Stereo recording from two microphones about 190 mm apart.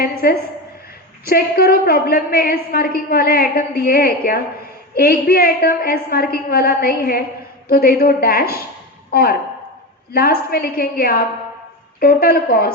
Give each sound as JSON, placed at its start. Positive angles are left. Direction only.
{"t": 0.0, "sound": "a woman's voice", "side_deg": 50}
{"t": 10.1, "sound": "a woman's voice", "side_deg": 50}